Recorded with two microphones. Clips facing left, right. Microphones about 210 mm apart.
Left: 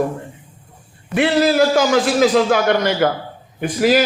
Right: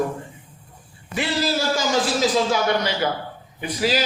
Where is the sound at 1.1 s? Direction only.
60° left (ahead or behind).